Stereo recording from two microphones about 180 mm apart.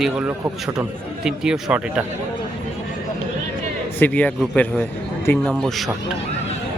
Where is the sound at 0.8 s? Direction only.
5° right (ahead or behind).